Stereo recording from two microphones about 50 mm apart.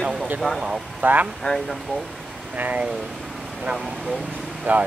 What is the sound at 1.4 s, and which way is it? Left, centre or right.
Speech, centre.